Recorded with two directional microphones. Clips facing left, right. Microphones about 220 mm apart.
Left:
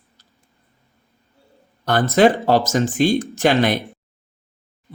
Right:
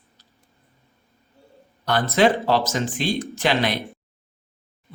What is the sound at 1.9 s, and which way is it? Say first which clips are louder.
Speech: left 4 dB; 45° left (ahead or behind).